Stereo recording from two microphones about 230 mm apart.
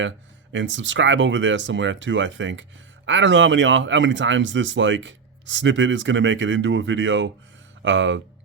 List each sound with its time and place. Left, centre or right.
0.5 s speech: right